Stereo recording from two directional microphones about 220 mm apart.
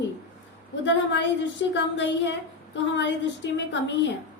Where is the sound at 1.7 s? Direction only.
55° left (ahead or behind).